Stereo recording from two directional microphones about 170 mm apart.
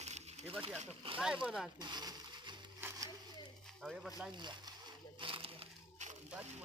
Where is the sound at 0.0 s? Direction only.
40° right (ahead or behind).